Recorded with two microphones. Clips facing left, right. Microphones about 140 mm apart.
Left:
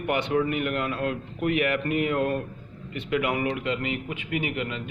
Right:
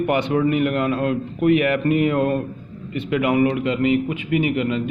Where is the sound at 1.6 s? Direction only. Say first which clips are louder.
Right 6 dB; 30° right (ahead or behind).